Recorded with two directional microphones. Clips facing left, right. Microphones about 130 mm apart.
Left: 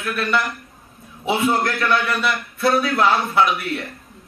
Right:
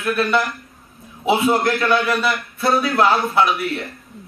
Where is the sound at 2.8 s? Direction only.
Centre (ahead or behind).